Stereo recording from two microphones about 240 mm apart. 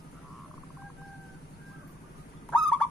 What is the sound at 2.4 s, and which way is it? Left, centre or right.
Fowl, centre.